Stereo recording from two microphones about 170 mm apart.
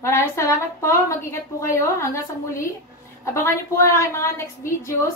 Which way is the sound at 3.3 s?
15° left (ahead or behind).